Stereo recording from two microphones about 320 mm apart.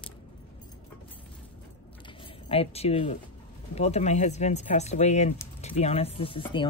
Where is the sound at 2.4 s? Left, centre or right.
Centre.